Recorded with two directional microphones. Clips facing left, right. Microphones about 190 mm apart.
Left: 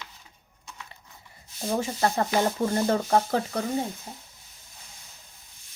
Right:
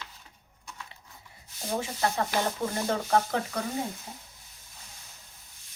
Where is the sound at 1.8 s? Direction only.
40° left (ahead or behind).